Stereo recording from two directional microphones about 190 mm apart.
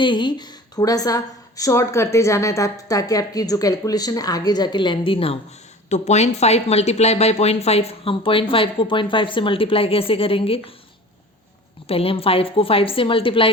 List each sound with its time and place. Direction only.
0.0 s speech: 25° left (ahead or behind)
11.9 s speech: 30° left (ahead or behind)